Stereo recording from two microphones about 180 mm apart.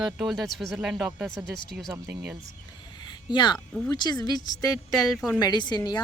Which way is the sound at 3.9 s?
25° left (ahead or behind).